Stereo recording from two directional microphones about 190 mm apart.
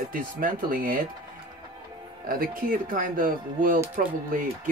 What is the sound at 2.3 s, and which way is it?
Speech, 50° right (ahead or behind).